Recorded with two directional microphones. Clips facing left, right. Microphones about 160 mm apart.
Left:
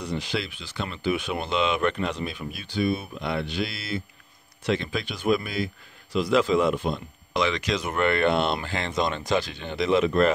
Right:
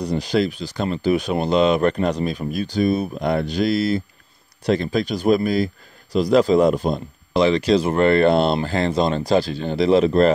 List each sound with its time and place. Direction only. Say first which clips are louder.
0.0 s speech: right 9 dB; 40° right (ahead or behind)